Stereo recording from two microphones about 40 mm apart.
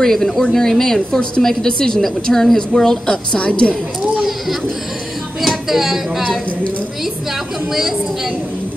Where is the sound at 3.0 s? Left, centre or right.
Left.